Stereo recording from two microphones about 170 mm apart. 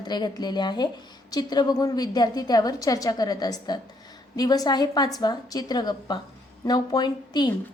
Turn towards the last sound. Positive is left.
turn(degrees=25)  # may be behind; listen again after turning